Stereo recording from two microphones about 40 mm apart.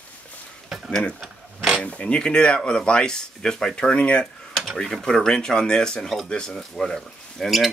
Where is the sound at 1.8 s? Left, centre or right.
Left.